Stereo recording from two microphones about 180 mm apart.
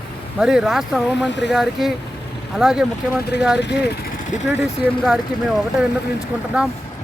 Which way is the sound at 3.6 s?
70° left (ahead or behind).